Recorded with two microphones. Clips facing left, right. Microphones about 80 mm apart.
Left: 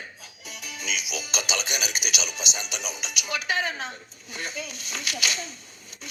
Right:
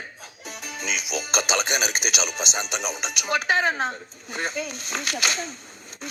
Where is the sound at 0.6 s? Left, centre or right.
Right.